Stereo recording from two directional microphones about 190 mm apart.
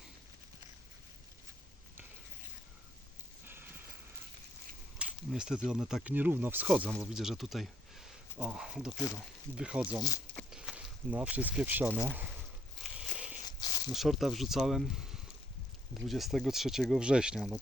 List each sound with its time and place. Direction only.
3.4 s a sound: 10° right (ahead or behind)
4.9 s speech: 5° right (ahead or behind)
13.0 s walk: 5° right (ahead or behind)
13.4 s walk: 20° left (ahead or behind)
13.9 s speech: centre (ahead or behind)